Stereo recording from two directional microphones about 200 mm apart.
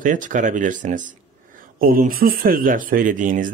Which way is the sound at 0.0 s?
40° right (ahead or behind).